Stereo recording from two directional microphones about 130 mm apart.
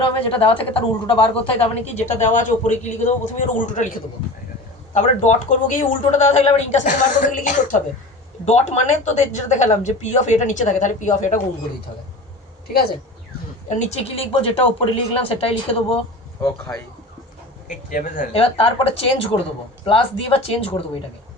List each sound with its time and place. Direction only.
0.0 s speech: 45° left (ahead or behind); by 3.9 s 70° left (ahead or behind)
4.9 s speech: 70° left (ahead or behind)
8.4 s speech: 55° left (ahead or behind)
13.7 s speech: 60° left (ahead or behind)
17.7 s speech: 90° left
18.3 s speech: 50° left (ahead or behind)